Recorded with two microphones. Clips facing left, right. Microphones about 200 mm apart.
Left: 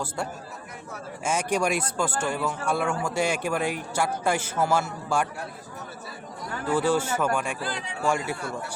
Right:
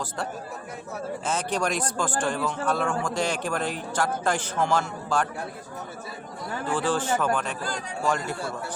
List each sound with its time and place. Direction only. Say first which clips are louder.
1.2 s speech: left 3 dB; 10° left (ahead or behind)
6.7 s speech: left 2 dB; 10° left (ahead or behind)
7.6 s speech: even; 45° right (ahead or behind)
8.0 s speech: left 1 dB; 10° left (ahead or behind)